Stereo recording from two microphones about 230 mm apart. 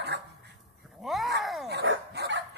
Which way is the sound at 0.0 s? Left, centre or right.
Right.